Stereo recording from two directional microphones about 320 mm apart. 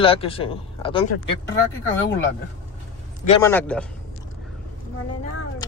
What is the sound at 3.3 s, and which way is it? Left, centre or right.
Speech, centre.